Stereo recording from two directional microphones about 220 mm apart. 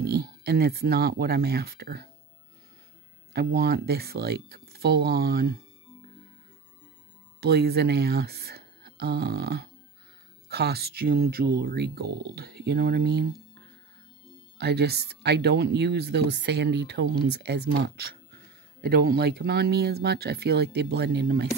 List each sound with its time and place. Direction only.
0.0 s speech: 45° right (ahead or behind)
3.3 s speech: 45° right (ahead or behind)
7.4 s speech: 45° right (ahead or behind)
14.6 s speech: 50° right (ahead or behind)